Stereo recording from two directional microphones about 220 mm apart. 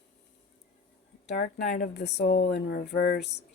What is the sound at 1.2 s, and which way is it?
Speech, 45° left (ahead or behind).